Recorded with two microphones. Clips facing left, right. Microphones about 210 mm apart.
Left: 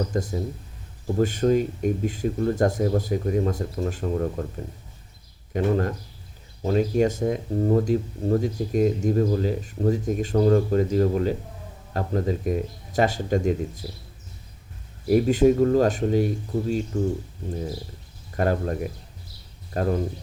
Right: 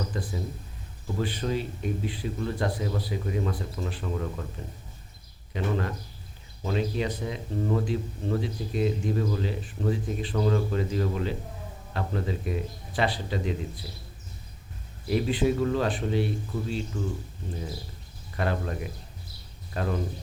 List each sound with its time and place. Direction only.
0.0 s speech: 45° left (ahead or behind)
5.5 s speech: 45° left (ahead or behind)
15.0 s speech: 45° left (ahead or behind)
18.3 s speech: 45° left (ahead or behind)